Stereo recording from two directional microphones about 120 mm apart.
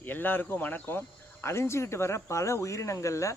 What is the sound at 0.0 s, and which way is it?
A man's voice, 15° left (ahead or behind).